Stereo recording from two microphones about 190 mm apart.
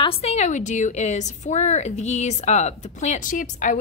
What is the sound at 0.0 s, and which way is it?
A woman's voice, 30° left (ahead or behind).